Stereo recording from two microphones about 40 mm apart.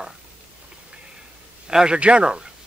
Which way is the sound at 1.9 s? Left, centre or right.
Right.